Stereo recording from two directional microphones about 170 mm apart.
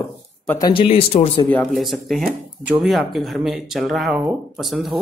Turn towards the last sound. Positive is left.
turn(degrees=0)  # may be behind; listen again after turning